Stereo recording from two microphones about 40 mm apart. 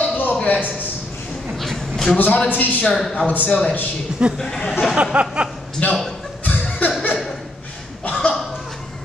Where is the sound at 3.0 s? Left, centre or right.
Centre.